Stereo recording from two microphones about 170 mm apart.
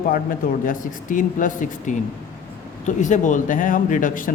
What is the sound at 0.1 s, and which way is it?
A man's voice, 55° left (ahead or behind).